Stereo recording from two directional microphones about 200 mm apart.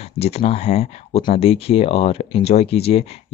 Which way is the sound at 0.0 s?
30° left (ahead or behind).